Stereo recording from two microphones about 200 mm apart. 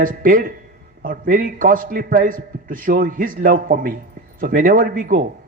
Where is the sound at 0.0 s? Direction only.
45° right (ahead or behind).